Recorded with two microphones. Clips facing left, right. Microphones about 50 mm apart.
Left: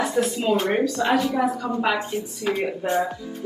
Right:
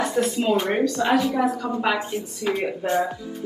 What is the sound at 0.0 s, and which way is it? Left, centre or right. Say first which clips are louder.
A woman's voice: even; centre.